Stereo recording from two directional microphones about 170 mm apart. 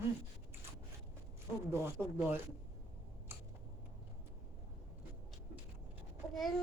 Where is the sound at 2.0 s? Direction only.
5° left (ahead or behind).